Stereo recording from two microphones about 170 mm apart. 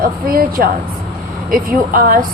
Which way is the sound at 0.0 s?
60° right (ahead or behind).